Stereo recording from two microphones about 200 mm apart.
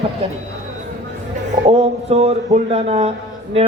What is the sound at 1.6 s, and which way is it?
A man's voice, 30° right (ahead or behind).